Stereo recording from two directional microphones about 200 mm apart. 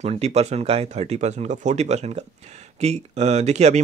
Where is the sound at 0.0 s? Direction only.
30° right (ahead or behind).